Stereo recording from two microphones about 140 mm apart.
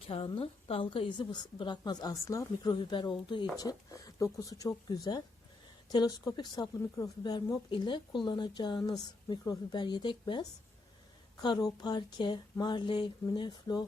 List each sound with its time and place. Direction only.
0.1 s speech: 40° left (ahead or behind)